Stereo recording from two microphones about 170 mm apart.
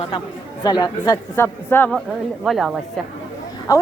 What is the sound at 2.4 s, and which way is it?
Speech, centre (ahead or behind).